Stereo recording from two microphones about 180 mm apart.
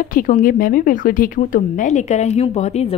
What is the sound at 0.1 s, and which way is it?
Speech, 50° left (ahead or behind).